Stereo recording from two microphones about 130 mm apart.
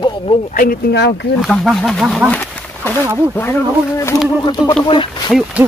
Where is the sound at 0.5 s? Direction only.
90° left.